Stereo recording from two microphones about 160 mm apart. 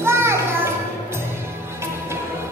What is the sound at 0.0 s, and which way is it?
Music, 15° right (ahead or behind).